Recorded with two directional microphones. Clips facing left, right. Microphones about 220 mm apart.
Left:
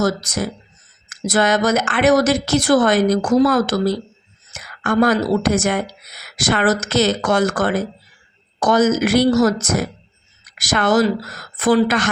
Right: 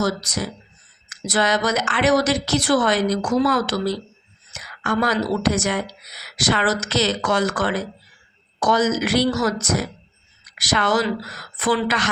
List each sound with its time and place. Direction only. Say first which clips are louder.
0.0 s speech: left 4 dB; 45° left (ahead or behind)